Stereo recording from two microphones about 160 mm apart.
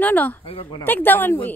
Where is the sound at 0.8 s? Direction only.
10° left (ahead or behind).